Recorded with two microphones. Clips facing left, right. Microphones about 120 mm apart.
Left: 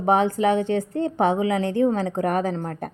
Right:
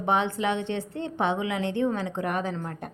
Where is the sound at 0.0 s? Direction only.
40° left (ahead or behind).